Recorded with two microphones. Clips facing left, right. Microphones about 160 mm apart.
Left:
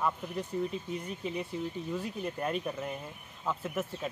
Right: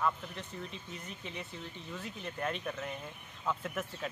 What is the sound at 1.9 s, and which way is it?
Speech, 10° left (ahead or behind).